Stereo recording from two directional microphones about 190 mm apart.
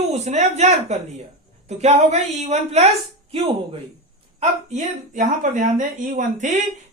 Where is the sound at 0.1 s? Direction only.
35° right (ahead or behind).